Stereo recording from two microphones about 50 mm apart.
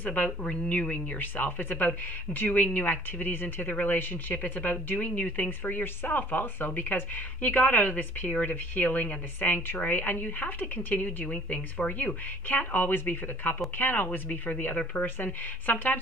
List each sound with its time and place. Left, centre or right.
0.0 s speech: left
11.2 s speech: left
12.0 s speech: left